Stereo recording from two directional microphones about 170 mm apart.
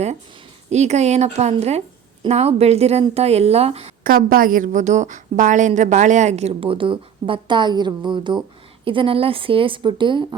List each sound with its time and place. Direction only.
0.7 s speech: 40° right (ahead or behind)
4.0 s a woman's voice: 55° right (ahead or behind); by 10.2 s 30° right (ahead or behind)